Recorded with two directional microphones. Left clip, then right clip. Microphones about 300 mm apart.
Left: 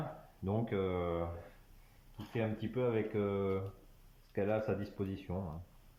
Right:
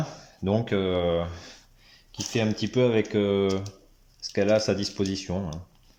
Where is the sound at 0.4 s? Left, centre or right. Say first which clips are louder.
Right 11 dB; right.